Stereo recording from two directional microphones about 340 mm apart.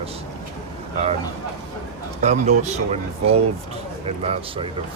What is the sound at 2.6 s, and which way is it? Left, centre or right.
Speech, centre.